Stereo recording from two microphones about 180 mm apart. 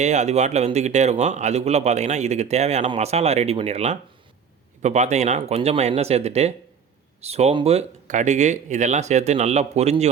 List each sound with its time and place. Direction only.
0.0 s a man's voice: 40° right (ahead or behind)